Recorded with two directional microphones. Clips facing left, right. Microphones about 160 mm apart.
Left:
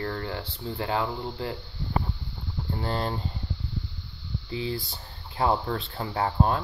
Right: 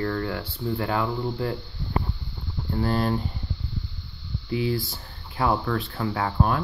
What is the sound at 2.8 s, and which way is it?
Speech, 25° left (ahead or behind).